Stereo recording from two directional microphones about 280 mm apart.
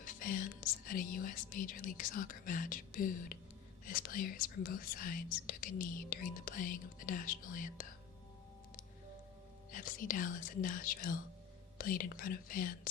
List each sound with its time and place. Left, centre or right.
0.0 s speech: left
9.7 s speech: left